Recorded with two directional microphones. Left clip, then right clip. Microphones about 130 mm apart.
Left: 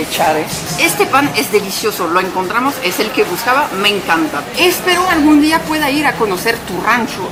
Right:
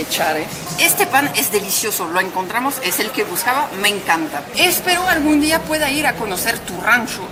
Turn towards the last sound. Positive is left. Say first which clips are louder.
# left 2 dB
turn(degrees=-25)  # may be behind; listen again after turning